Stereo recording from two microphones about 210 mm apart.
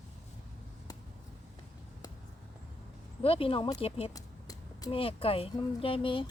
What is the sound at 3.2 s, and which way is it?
Speech, 25° left (ahead or behind).